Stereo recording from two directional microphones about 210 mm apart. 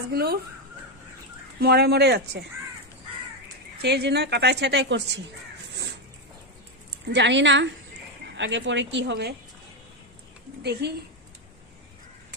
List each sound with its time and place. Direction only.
0.1 s a woman's voice: 45° right (ahead or behind)
1.6 s a woman's voice: 50° right (ahead or behind)
3.8 s a woman's voice: 50° right (ahead or behind)
7.1 s speech: 55° right (ahead or behind)
10.6 s a woman's voice: 50° right (ahead or behind)